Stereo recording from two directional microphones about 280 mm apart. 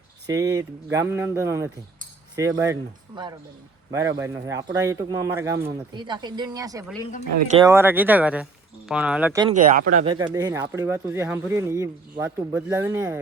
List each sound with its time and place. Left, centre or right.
0.3 s speech: centre
9.6 s speech: right
10.2 s speech: centre